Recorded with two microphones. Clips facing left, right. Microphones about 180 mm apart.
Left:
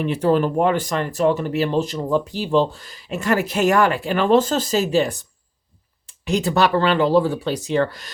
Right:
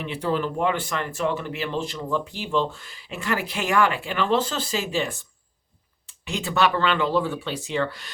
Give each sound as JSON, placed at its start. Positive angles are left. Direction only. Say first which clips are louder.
{"t": 0.0, "sound": "speech", "louder": "left 7 dB", "side_deg": 45}
{"t": 6.2, "sound": "speech", "louder": "left 5 dB", "side_deg": 40}